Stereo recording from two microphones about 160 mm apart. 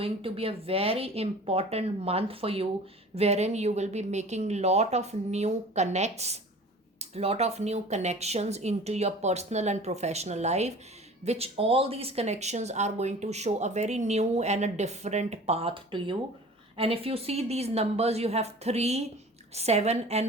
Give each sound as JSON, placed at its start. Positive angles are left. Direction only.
{"t": 0.0, "sound": "speech", "side_deg": -35}